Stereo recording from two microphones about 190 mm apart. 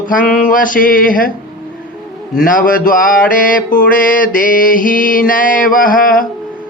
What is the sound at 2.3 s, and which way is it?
Mantra, 50° left (ahead or behind).